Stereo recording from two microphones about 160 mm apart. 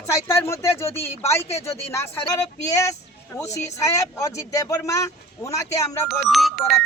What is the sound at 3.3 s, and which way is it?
Speech, 20° left (ahead or behind).